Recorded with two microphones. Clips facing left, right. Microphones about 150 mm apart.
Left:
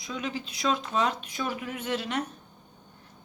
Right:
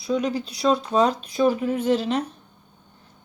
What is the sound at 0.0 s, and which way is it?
A woman's voice, 35° right (ahead or behind).